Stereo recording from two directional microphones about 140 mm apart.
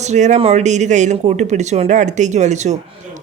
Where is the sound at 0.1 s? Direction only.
55° right (ahead or behind).